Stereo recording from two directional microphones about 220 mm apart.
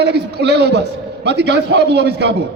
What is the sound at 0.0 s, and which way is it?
A man's voice, 50° right (ahead or behind).